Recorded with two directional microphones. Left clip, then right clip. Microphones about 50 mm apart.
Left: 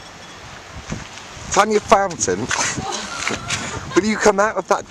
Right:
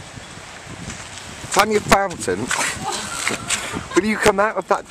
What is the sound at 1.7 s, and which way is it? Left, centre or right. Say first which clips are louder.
Speech: left 2 dB; left.